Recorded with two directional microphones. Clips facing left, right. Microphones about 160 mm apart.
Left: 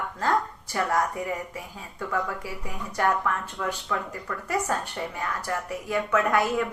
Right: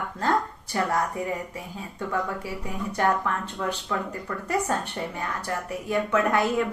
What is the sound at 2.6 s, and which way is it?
Speech, 30° right (ahead or behind).